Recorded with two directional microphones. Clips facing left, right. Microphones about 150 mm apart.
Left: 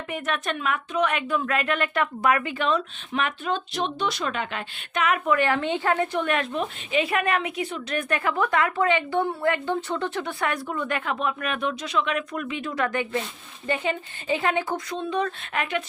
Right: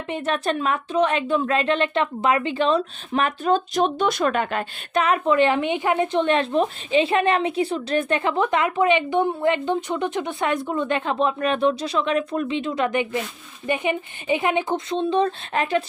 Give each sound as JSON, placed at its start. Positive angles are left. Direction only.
{"t": 0.1, "sound": "a woman's voice", "side_deg": -30}
{"t": 4.9, "sound": "a woman's voice", "side_deg": -30}